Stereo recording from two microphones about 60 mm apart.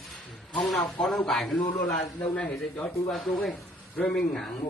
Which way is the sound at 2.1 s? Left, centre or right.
Left.